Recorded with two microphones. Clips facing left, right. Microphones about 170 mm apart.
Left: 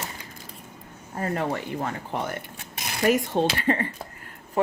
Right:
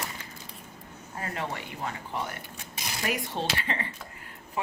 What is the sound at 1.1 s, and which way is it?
Speech, 45° left (ahead or behind).